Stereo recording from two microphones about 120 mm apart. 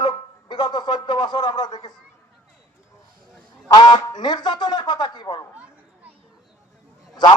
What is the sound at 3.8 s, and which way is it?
A man's voice, 35° left (ahead or behind).